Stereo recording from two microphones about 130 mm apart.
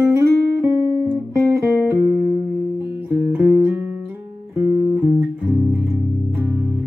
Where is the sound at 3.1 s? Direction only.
10° right (ahead or behind).